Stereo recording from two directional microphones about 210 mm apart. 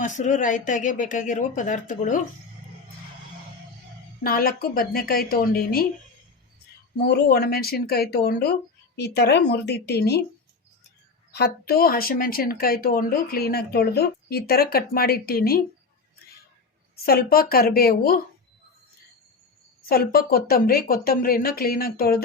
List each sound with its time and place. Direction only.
0.0 s a woman's voice: 35° left (ahead or behind)
4.2 s speech: 45° left (ahead or behind)
7.0 s speech: 50° left (ahead or behind)
11.3 s speech: 50° left (ahead or behind)
16.9 s speech: 45° left (ahead or behind)
19.9 s speech: 45° left (ahead or behind)